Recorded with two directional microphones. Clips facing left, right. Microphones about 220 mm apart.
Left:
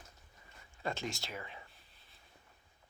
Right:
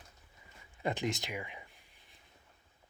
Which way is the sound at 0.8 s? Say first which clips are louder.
Right 5 dB; 20° right (ahead or behind).